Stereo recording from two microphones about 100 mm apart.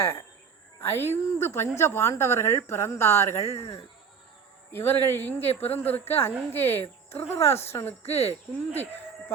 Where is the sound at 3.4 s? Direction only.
80° left.